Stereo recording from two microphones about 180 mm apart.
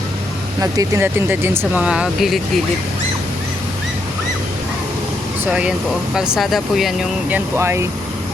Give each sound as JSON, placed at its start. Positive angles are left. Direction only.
{"t": 0.6, "sound": "speech", "side_deg": -15}
{"t": 5.5, "sound": "speech", "side_deg": -5}